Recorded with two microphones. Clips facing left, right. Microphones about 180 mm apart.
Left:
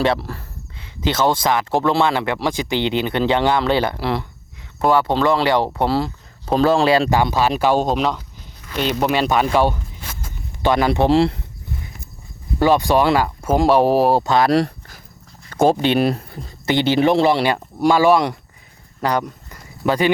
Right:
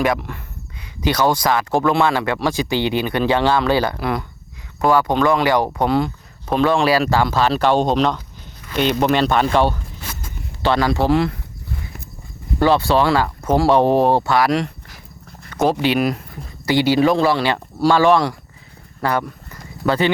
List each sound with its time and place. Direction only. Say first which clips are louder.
0.0 s a sound: left 1 dB; 30° left (ahead or behind)
1.0 s speech: right 1 dB; 20° left (ahead or behind)
12.5 s speech: even; 15° left (ahead or behind)
14.3 s speech: left 2 dB; 30° left (ahead or behind); by 20.1 s 15° left (ahead or behind)